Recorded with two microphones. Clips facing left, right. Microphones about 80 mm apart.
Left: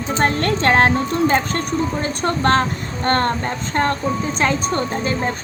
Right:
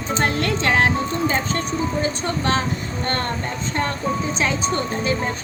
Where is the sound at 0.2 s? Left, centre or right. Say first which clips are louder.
Left 4 dB; left.